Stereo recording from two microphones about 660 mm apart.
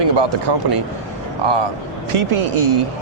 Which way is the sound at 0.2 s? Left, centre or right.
Right.